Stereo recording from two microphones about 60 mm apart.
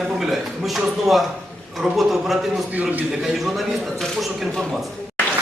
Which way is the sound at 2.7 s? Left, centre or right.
Right.